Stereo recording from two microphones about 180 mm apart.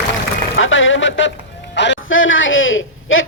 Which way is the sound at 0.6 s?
90° left.